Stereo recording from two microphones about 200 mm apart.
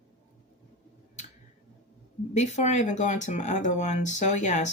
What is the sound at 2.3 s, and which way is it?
Speech, 35° left (ahead or behind).